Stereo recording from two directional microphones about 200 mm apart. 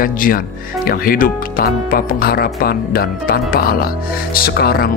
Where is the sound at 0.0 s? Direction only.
45° left (ahead or behind).